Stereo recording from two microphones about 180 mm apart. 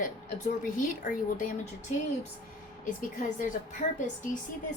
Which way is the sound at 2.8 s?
45° left (ahead or behind).